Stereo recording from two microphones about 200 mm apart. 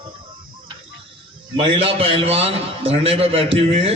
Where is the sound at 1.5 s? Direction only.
25° right (ahead or behind).